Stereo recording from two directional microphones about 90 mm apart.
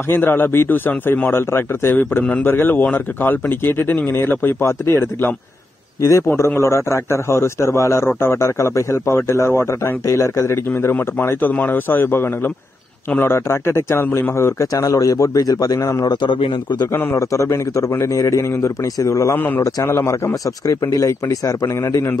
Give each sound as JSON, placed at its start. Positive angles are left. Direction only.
{"t": 0.1, "sound": "a man's voice", "side_deg": 25}
{"t": 14.7, "sound": "a man's voice", "side_deg": 40}
{"t": 16.1, "sound": "a man's voice", "side_deg": 60}
{"t": 16.9, "sound": "a man's voice", "side_deg": 30}
{"t": 19.3, "sound": "speech", "side_deg": 20}
{"t": 19.6, "sound": "a man's voice", "side_deg": 35}